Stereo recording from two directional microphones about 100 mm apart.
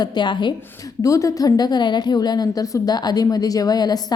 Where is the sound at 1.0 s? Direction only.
35° left (ahead or behind).